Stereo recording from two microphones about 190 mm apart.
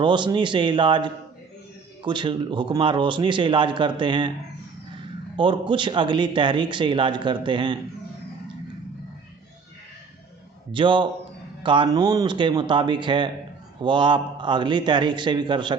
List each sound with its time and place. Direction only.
0.0 s speech: 25° right (ahead or behind)
5.4 s speech: 25° right (ahead or behind)
10.7 s speech: 25° right (ahead or behind)